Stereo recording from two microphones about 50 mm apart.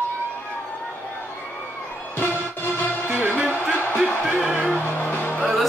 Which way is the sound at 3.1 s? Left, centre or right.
Right.